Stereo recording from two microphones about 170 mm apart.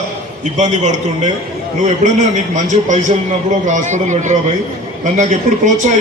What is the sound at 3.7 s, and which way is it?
A man's voice, 45° right (ahead or behind).